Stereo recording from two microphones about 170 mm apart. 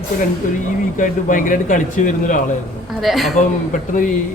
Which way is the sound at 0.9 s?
50° left (ahead or behind).